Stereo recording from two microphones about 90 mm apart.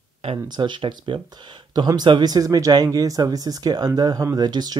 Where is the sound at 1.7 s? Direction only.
50° right (ahead or behind).